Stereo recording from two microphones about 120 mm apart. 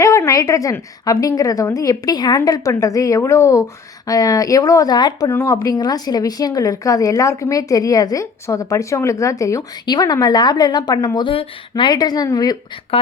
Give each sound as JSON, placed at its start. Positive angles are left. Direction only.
{"t": 0.0, "sound": "a woman's voice", "side_deg": 25}
{"t": 5.3, "sound": "a woman's voice", "side_deg": 25}
{"t": 12.9, "sound": "speech", "side_deg": 50}